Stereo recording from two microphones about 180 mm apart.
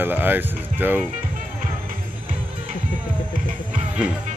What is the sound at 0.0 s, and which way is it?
Speech, 10° right (ahead or behind).